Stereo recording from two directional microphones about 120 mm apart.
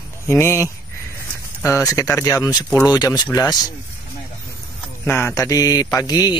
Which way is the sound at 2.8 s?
35° left (ahead or behind).